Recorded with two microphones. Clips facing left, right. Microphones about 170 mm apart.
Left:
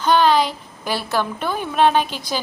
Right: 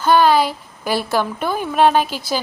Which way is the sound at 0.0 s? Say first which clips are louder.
Right 2 dB; 10° right (ahead or behind).